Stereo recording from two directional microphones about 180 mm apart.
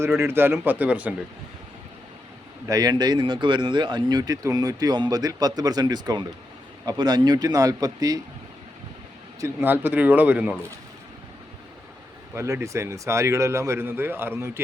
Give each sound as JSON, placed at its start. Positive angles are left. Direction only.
{"t": 0.0, "sound": "speech", "side_deg": -15}
{"t": 2.6, "sound": "speech", "side_deg": -20}
{"t": 9.4, "sound": "speech", "side_deg": -10}
{"t": 12.3, "sound": "speech", "side_deg": -15}